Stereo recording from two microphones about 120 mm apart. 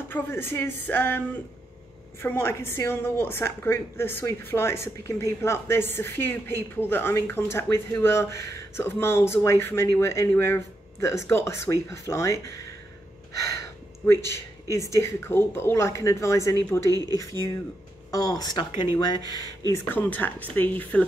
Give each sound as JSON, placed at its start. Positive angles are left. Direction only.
{"t": 0.1, "sound": "a woman's voice", "side_deg": 20}
{"t": 2.2, "sound": "a woman's voice", "side_deg": 20}
{"t": 13.4, "sound": "gasp", "side_deg": 25}
{"t": 14.2, "sound": "a woman's voice", "side_deg": 20}
{"t": 16.9, "sound": "speech", "side_deg": -30}
{"t": 18.1, "sound": "speech", "side_deg": 30}
{"t": 19.7, "sound": "a woman's voice", "side_deg": 15}